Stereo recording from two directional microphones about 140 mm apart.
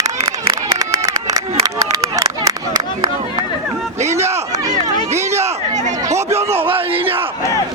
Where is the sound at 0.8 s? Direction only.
25° right (ahead or behind).